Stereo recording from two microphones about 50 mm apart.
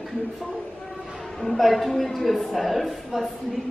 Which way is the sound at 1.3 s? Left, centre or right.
Centre.